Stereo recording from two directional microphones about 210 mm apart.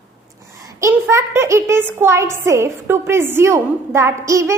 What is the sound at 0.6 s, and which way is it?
A child's voice, 15° right (ahead or behind).